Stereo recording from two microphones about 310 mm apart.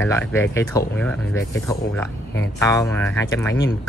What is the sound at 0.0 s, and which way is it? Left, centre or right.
Speech, centre.